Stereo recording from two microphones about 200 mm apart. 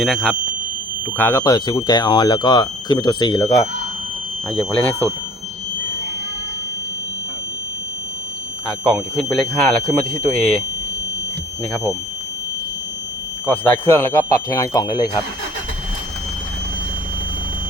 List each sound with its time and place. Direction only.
0.0 s speech: centre (ahead or behind); by 3.7 s 20° left (ahead or behind)
4.5 s speech: 5° left (ahead or behind)
8.6 s speech: 5° left (ahead or behind)
11.7 s speech: centre (ahead or behind)
13.5 s speech: 10° left (ahead or behind)